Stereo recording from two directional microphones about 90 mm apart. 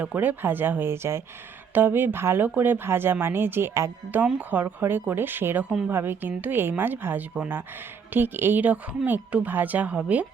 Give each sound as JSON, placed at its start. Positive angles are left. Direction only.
{"t": 0.0, "sound": "speech", "side_deg": -20}